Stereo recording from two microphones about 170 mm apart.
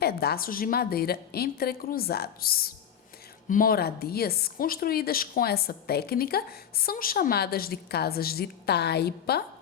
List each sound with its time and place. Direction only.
0.0 s speech: 65° left (ahead or behind)